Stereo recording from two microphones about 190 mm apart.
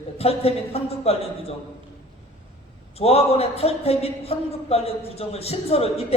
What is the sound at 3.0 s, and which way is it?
Speech, 30° left (ahead or behind).